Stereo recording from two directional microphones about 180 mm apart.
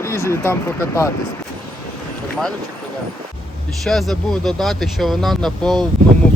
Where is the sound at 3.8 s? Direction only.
Centre (ahead or behind).